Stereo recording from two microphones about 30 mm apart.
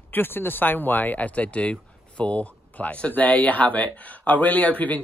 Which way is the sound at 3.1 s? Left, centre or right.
Left.